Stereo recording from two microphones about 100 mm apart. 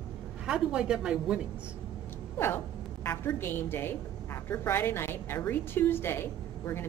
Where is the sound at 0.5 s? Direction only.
10° right (ahead or behind).